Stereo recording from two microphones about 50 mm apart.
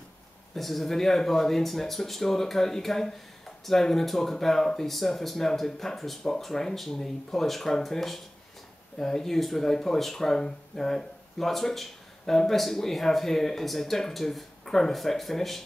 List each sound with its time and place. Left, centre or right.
0.6 s speech: centre